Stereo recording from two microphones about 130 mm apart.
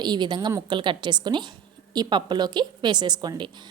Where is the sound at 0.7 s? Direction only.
35° right (ahead or behind).